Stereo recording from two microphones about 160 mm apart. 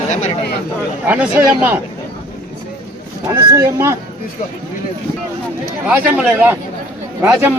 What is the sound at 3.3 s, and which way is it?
Speech, 20° right (ahead or behind).